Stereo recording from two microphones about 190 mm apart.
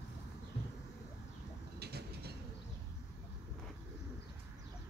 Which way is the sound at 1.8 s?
60° right (ahead or behind).